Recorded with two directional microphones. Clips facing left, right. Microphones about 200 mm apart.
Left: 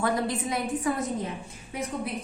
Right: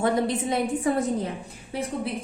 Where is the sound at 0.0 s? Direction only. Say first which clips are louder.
Right 4 dB; 25° right (ahead or behind).